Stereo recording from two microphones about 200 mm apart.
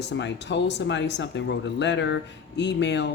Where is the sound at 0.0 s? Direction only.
60° left (ahead or behind).